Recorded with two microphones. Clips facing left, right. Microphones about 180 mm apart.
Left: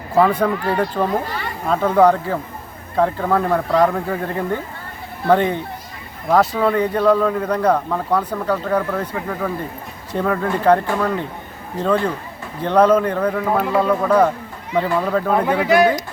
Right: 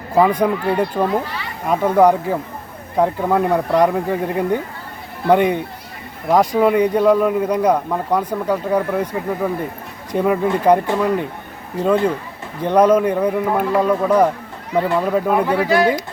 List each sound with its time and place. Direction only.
0.2 s speech: 10° right (ahead or behind)
15.6 s speech: 15° left (ahead or behind)